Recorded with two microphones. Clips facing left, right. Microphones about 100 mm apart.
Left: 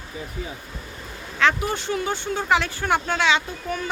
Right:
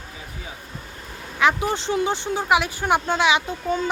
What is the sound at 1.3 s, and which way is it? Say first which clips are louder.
Speech: right 1 dB; 15° right (ahead or behind).